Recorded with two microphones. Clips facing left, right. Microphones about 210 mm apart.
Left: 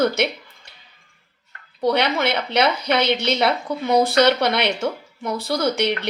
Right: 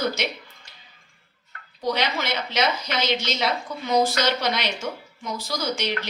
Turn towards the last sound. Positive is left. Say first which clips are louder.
# left 6 dB
turn(degrees=60)  # may be behind; listen again after turning